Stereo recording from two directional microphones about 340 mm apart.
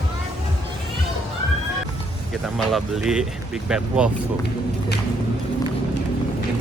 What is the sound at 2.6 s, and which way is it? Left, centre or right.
Speech, centre.